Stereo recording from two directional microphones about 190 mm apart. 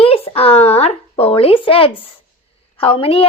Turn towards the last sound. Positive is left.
turn(degrees=30)  # may be behind; listen again after turning